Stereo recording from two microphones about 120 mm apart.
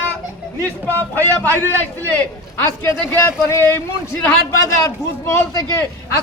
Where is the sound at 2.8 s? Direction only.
20° left (ahead or behind).